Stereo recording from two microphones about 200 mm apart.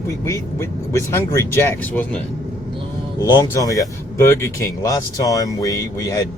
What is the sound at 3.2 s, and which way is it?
Speech, 15° left (ahead or behind).